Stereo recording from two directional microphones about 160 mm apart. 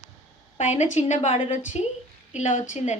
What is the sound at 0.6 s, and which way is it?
Speech, 45° left (ahead or behind).